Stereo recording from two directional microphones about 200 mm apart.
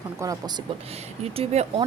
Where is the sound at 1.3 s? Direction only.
30° right (ahead or behind).